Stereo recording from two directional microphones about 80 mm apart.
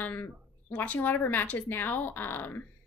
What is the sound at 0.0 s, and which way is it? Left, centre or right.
A woman's voice, left.